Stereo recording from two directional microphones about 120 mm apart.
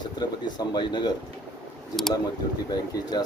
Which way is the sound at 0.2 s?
35° left (ahead or behind).